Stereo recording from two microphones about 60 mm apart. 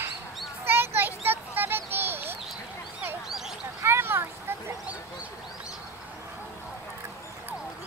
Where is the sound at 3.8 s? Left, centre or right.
Right.